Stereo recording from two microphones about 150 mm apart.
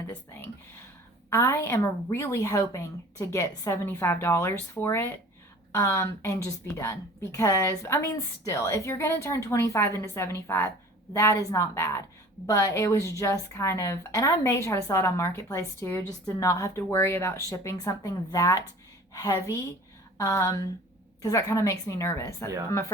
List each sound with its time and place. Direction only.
1.3 s a woman's voice: 20° left (ahead or behind)